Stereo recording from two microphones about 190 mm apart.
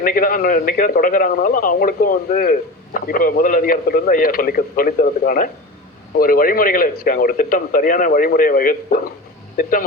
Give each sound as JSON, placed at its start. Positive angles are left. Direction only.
{"t": 0.0, "sound": "a man's voice", "side_deg": 45}